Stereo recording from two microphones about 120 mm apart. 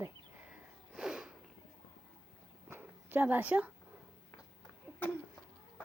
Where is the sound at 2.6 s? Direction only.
15° right (ahead or behind).